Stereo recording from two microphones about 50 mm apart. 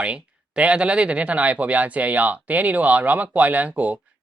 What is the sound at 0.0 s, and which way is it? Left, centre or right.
Speech, right.